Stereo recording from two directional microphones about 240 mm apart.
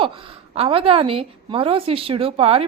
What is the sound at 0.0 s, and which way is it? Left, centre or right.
A woman's voice, right.